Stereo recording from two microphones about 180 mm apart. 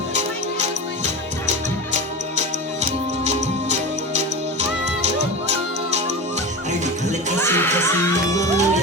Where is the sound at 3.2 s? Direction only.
40° right (ahead or behind).